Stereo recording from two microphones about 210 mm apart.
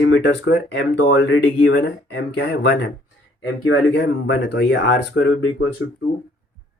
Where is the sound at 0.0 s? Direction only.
55° left (ahead or behind).